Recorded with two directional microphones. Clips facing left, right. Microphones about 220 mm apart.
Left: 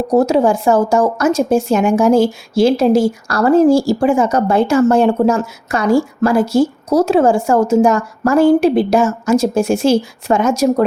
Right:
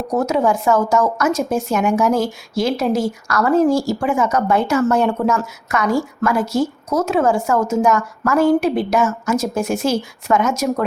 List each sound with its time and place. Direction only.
0.1 s a woman's voice: 30° left (ahead or behind)